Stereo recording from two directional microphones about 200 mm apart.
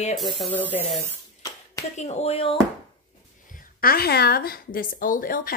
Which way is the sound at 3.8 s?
50° left (ahead or behind).